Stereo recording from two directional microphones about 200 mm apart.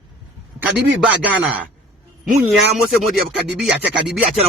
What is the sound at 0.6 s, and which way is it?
A man's voice, 5° right (ahead or behind).